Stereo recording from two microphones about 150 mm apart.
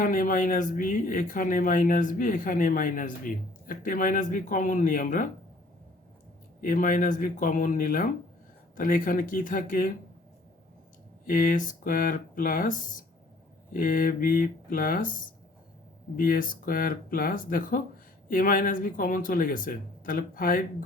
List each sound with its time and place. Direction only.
0.0 s speech: 65° left (ahead or behind)
6.6 s speech: 65° left (ahead or behind)
11.3 s speech: 65° left (ahead or behind)
16.1 s speech: 70° left (ahead or behind)